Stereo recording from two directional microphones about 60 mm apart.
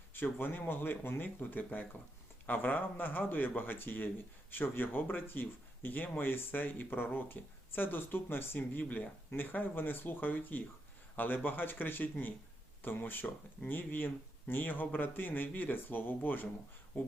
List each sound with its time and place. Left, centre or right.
0.1 s speech: left